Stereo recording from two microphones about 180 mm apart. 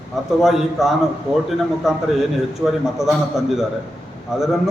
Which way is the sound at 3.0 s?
Centre (ahead or behind).